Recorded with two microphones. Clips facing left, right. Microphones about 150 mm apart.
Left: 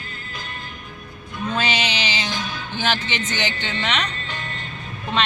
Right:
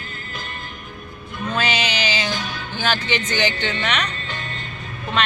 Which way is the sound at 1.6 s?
20° left (ahead or behind).